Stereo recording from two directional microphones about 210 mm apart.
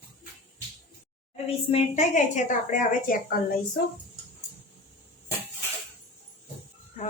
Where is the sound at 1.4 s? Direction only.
30° left (ahead or behind).